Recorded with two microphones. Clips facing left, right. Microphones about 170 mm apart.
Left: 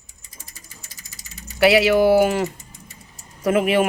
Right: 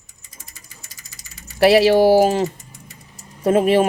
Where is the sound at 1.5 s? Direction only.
30° right (ahead or behind).